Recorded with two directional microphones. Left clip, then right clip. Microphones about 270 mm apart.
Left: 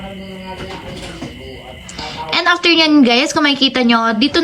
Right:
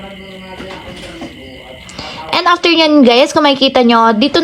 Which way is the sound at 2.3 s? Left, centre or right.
Centre.